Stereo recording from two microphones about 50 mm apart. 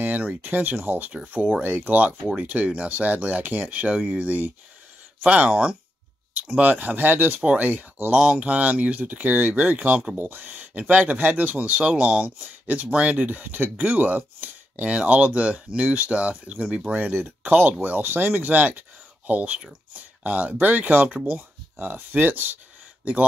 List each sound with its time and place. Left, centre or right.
0.0 s a sound: right
0.4 s speech: right
1.3 s speech: right
1.6 s speech: right
2.4 s speech: right
5.2 s speech: right
8.1 s speech: centre
10.1 s speech: right
17.1 s speech: right